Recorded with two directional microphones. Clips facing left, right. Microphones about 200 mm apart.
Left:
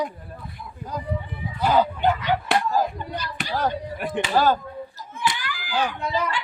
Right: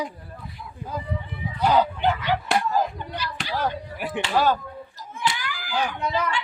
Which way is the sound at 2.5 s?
Centre (ahead or behind).